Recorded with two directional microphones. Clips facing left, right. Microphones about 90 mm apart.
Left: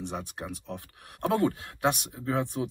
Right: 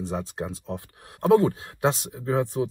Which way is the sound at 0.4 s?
25° right (ahead or behind).